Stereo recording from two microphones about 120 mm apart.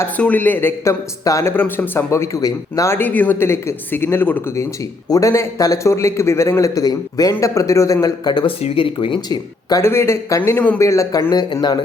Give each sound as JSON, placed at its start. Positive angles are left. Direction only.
{"t": 0.2, "sound": "a man's voice", "side_deg": 15}
{"t": 1.2, "sound": "a man's voice", "side_deg": 25}
{"t": 5.0, "sound": "a man's voice", "side_deg": 30}
{"t": 8.6, "sound": "speech", "side_deg": 50}
{"t": 9.8, "sound": "a man's voice", "side_deg": 20}